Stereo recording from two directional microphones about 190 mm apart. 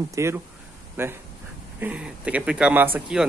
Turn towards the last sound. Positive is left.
turn(degrees=-5)  # may be behind; listen again after turning